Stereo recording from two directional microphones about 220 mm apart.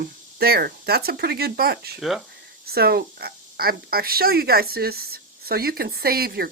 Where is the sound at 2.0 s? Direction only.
Centre (ahead or behind).